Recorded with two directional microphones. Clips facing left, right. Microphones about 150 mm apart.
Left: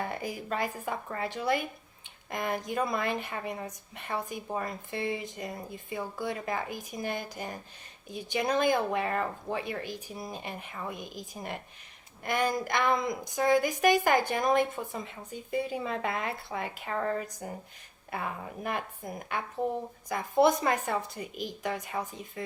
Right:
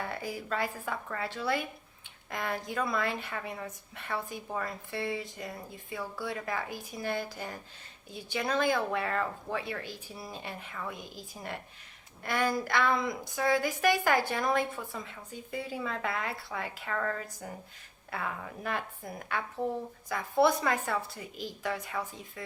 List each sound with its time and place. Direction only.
0.0 s a woman's voice: 20° left (ahead or behind)